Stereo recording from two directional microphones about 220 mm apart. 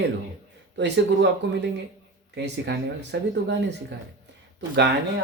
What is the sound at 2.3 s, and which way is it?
Speech, 50° right (ahead or behind).